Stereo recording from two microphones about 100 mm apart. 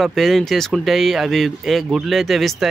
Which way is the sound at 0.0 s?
Centre (ahead or behind).